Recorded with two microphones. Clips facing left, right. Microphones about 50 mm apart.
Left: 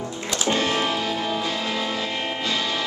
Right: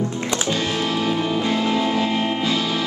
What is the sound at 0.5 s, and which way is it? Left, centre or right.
Music, left.